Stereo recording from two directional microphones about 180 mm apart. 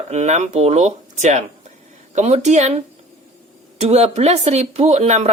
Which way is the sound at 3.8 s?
35° right (ahead or behind).